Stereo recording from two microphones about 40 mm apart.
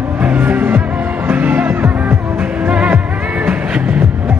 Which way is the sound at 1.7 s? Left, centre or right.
Right.